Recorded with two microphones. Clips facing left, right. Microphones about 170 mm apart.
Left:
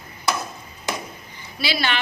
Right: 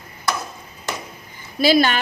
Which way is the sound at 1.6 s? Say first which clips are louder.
Right 9 dB; 45° right (ahead or behind).